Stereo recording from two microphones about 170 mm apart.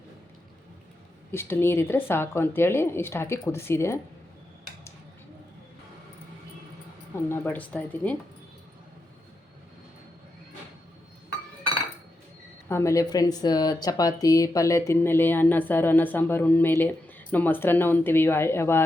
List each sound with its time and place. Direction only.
1.3 s speech: 15° left (ahead or behind)
7.3 s speech: 10° left (ahead or behind)
12.6 s speech: 15° left (ahead or behind)